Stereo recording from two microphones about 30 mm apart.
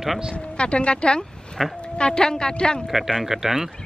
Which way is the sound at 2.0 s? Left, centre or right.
Left.